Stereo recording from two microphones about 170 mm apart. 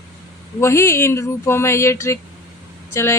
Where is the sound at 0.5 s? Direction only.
15° left (ahead or behind).